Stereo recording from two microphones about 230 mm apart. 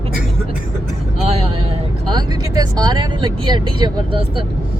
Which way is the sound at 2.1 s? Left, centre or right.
Centre.